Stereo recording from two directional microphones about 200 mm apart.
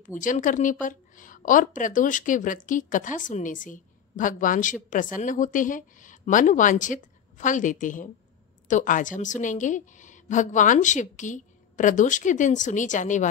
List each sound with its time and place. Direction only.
0.0 s a woman's voice: 40° left (ahead or behind)